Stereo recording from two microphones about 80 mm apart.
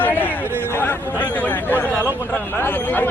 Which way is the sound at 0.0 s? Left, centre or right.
Left.